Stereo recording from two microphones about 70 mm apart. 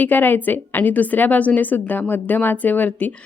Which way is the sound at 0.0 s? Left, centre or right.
Left.